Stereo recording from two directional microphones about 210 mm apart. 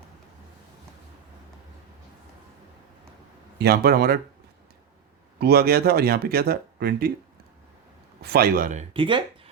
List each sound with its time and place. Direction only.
3.6 s speech: 50° right (ahead or behind)
5.4 s speech: 50° right (ahead or behind)
8.2 s speech: 45° right (ahead or behind); by 9.5 s 25° right (ahead or behind)